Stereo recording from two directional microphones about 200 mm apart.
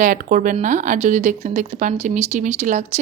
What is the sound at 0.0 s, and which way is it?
Speech, 40° right (ahead or behind).